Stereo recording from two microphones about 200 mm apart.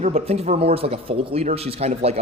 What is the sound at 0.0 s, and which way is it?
A man's voice, 30° right (ahead or behind).